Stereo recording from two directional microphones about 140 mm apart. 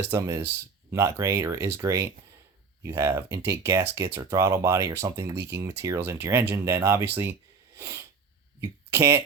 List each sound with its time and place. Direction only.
0.1 s speech: 20° right (ahead or behind)
7.8 s sneeze: 20° right (ahead or behind)
8.6 s speech: 20° right (ahead or behind)